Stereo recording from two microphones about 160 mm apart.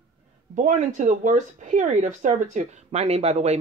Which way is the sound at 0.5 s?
50° right (ahead or behind).